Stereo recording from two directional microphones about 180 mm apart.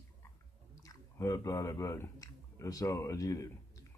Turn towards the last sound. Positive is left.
turn(degrees=20)  # may be behind; listen again after turning